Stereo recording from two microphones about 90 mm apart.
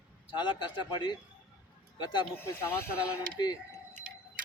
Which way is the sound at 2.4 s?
25° left (ahead or behind).